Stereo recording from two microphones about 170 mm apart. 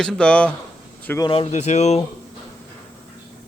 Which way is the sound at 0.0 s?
5° left (ahead or behind).